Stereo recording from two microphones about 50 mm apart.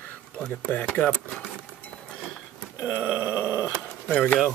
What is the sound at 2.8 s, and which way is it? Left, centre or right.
Groan, right.